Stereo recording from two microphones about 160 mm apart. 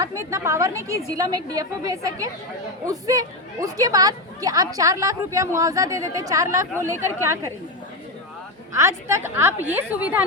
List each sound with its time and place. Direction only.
0.0 s a woman's voice: 20° right (ahead or behind)
8.7 s a woman's voice: 15° right (ahead or behind)